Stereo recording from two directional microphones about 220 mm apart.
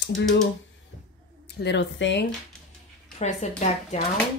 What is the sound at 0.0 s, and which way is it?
Speech, 55° left (ahead or behind).